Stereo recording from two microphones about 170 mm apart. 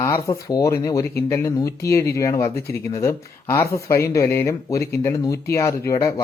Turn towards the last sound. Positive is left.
turn(degrees=20)  # may be behind; listen again after turning